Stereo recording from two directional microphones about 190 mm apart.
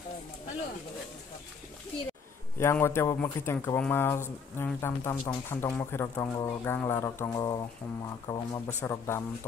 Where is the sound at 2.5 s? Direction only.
10° left (ahead or behind).